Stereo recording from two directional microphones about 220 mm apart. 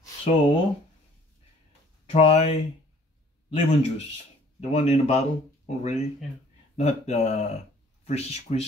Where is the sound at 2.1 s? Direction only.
30° left (ahead or behind).